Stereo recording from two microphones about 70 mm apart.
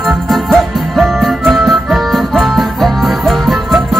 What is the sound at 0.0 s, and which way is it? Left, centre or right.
Music, centre.